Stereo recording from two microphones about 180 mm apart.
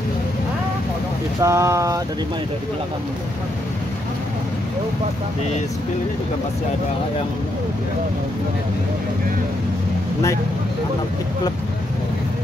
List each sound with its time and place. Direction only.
1.4 s speech: 15° right (ahead or behind)